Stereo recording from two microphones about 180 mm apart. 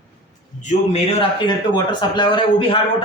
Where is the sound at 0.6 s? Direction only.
35° left (ahead or behind).